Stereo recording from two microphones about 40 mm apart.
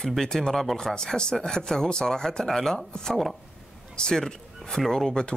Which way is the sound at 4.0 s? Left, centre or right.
Centre.